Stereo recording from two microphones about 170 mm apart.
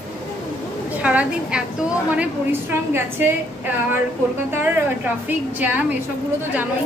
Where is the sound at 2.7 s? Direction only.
10° right (ahead or behind).